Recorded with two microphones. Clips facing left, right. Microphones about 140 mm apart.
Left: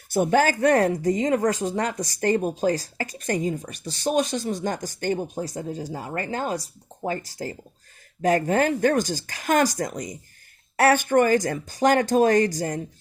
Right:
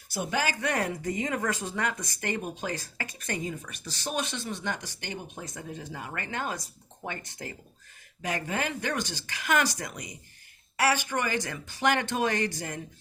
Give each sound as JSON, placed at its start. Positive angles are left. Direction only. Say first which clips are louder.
{"t": 0.1, "sound": "speech", "louder": "left 10 dB", "side_deg": 50}
{"t": 8.2, "sound": "speech", "louder": "left 11 dB", "side_deg": 45}